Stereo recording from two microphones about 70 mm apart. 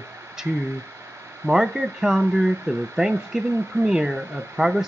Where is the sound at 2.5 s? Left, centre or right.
Right.